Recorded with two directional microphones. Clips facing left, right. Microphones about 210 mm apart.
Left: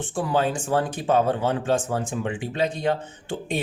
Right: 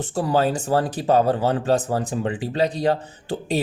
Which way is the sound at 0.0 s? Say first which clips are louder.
Right 3 dB; 40° right (ahead or behind).